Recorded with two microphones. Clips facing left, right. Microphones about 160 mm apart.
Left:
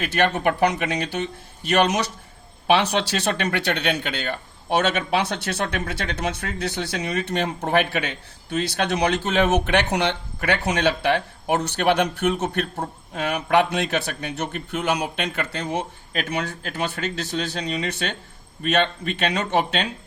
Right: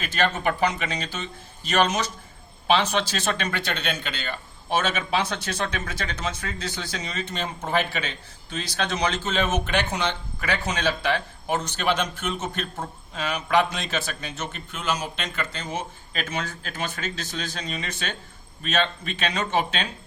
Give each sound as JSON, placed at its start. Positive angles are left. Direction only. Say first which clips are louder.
{"t": 0.0, "sound": "a man's voice", "louder": "left 4 dB", "side_deg": 60}